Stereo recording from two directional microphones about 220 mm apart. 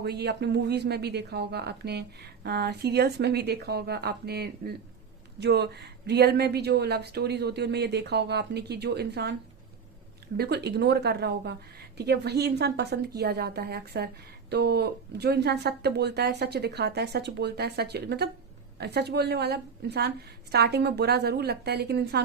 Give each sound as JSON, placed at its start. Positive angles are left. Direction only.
{"t": 0.0, "sound": "speech", "side_deg": -50}
{"t": 10.3, "sound": "speech", "side_deg": -45}